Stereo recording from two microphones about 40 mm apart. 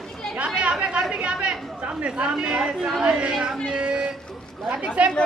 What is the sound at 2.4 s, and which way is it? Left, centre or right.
Speech, centre.